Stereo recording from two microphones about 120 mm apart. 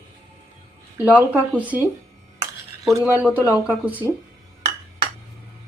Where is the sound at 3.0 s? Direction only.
10° right (ahead or behind).